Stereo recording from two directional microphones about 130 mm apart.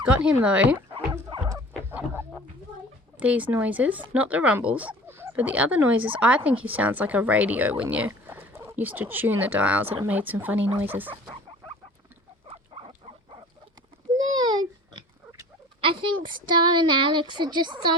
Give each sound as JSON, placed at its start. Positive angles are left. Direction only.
{"t": 0.0, "sound": "a woman's voice", "side_deg": -10}
{"t": 1.5, "sound": "a sound", "side_deg": -25}
{"t": 3.2, "sound": "a woman's voice", "side_deg": -10}
{"t": 12.5, "sound": "pig", "side_deg": -45}
{"t": 14.3, "sound": "a sound", "side_deg": -35}
{"t": 15.8, "sound": "a woman's voice", "side_deg": -40}